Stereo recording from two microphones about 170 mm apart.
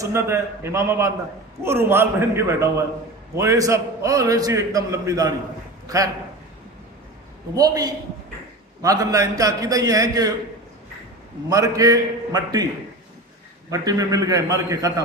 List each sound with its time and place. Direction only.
0.0 s a man's voice: 15° right (ahead or behind)
7.5 s a man's voice: 20° right (ahead or behind)
11.4 s a man's voice: 20° right (ahead or behind)
13.7 s a man's voice: 20° right (ahead or behind)